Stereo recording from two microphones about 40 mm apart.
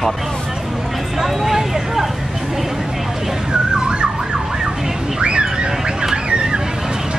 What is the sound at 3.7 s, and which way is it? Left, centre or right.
Emergency vehicle, right.